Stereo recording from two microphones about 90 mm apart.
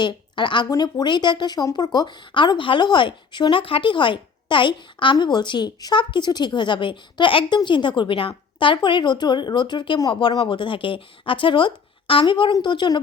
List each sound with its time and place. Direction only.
0.0 s speech: 60° left (ahead or behind)
12.2 s speech: 60° left (ahead or behind)